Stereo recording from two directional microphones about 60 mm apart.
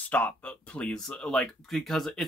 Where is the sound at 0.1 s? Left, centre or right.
Left.